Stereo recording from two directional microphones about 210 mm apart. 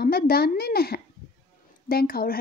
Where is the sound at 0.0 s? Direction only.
45° left (ahead or behind).